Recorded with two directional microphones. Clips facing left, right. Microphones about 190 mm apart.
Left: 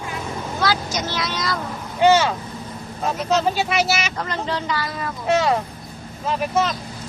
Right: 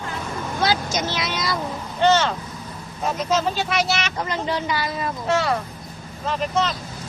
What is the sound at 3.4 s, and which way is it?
Speech, 10° left (ahead or behind).